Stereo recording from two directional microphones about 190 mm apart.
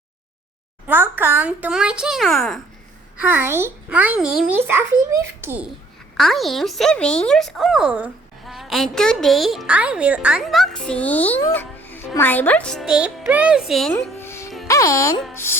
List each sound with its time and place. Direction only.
0.9 s speech: 10° right (ahead or behind)
3.2 s a child's voice: 10° right (ahead or behind)
14.0 s music: 15° left (ahead or behind)
14.7 s speech: 15° left (ahead or behind)